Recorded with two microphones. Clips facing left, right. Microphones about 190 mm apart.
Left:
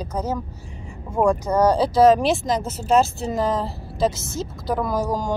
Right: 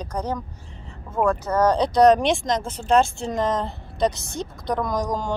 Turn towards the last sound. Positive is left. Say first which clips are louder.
# left 2 dB
turn(degrees=5)  # may be behind; listen again after turning